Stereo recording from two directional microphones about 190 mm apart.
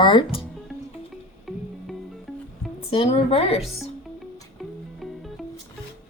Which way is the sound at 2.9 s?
30° left (ahead or behind).